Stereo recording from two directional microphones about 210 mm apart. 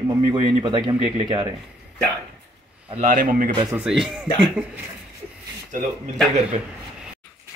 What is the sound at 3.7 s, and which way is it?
Speech, 5° right (ahead or behind).